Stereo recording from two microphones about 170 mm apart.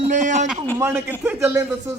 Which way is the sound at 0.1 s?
50° right (ahead or behind).